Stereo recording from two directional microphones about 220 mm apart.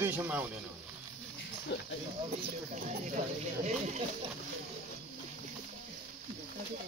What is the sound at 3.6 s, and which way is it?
Speech, 30° right (ahead or behind).